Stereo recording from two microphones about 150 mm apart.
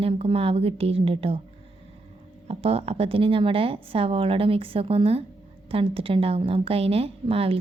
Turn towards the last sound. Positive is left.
turn(degrees=-40)  # may be behind; listen again after turning